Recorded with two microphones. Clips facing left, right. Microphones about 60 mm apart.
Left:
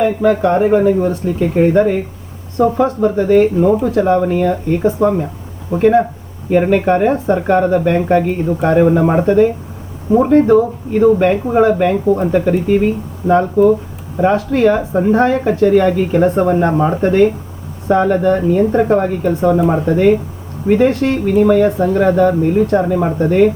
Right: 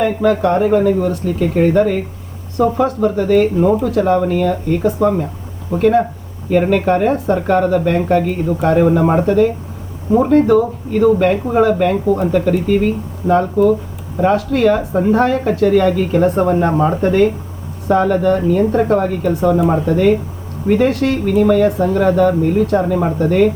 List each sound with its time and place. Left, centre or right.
0.0 s speech: centre